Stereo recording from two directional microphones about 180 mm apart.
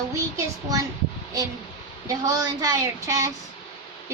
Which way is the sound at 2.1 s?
20° right (ahead or behind).